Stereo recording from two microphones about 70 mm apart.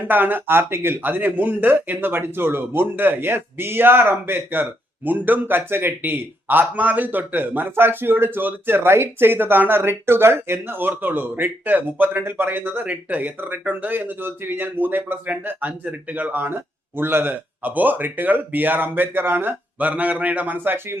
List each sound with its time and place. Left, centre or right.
0.0 s a man's voice: right